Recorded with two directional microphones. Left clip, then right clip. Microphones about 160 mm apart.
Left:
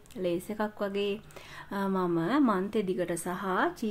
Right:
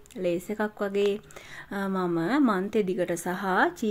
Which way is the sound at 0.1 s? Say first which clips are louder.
Right 3 dB; 15° right (ahead or behind).